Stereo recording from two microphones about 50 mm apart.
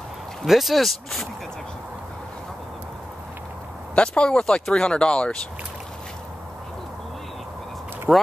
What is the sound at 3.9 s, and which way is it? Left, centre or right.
Speech, left.